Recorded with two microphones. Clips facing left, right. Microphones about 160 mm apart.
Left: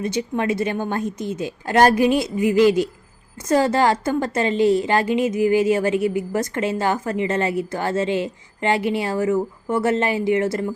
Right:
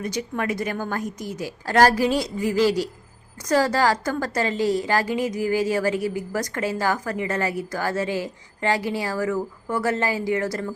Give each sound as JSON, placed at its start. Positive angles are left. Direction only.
{"t": 0.0, "sound": "a woman's voice", "side_deg": 25}